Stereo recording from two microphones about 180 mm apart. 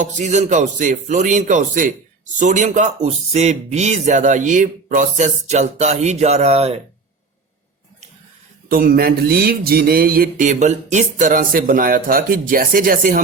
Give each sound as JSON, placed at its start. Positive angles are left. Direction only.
{"t": 0.0, "sound": "mantra", "side_deg": -40}
{"t": 2.4, "sound": "speech", "side_deg": -45}
{"t": 8.7, "sound": "mantra", "side_deg": -55}